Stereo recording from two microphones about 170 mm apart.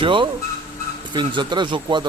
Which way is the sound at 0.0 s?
30° right (ahead or behind).